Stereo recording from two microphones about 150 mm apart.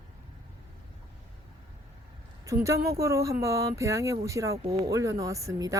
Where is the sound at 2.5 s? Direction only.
20° right (ahead or behind).